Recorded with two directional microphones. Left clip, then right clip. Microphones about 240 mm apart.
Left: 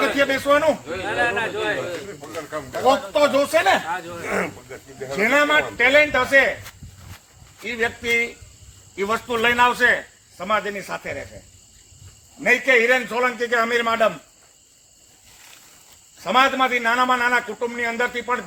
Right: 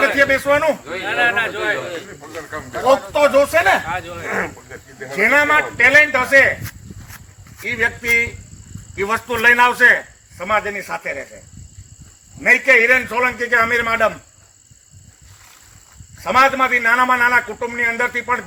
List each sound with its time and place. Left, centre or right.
0.2 s a man's voice: centre
1.0 s speech: right
2.3 s snake: left
2.8 s a man's voice: centre
3.8 s speech: right
4.3 s speech: left
5.1 s a man's voice: centre
7.6 s a man's voice: centre
12.4 s a man's voice: centre
16.2 s a man's voice: centre